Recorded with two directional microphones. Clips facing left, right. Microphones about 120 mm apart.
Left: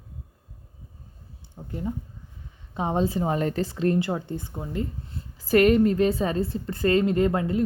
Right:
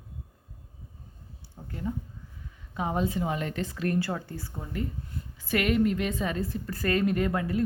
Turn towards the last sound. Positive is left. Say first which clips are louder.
# left 5 dB
turn(degrees=25)  # may be behind; listen again after turning